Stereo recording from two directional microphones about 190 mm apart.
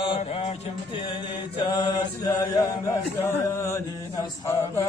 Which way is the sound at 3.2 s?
15° left (ahead or behind).